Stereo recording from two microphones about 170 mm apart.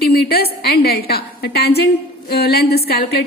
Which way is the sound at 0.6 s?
65° left (ahead or behind).